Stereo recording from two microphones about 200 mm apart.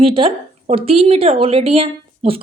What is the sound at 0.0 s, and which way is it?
Speech, 25° right (ahead or behind).